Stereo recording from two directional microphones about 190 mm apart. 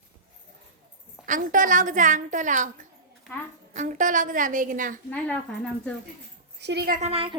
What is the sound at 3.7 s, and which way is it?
A woman's voice, 40° right (ahead or behind).